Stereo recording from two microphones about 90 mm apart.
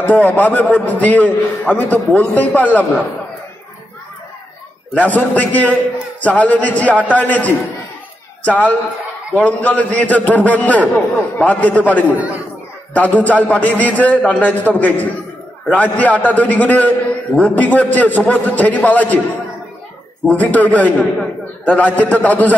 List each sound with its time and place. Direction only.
0.0 s a man's voice: 20° left (ahead or behind)
4.9 s a man's voice: 15° left (ahead or behind)
20.2 s a man's voice: 15° left (ahead or behind)